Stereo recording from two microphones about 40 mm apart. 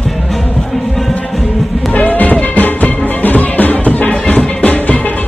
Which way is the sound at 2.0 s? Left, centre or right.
Left.